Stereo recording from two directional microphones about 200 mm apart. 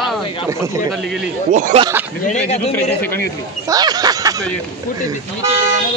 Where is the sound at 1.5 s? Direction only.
35° right (ahead or behind).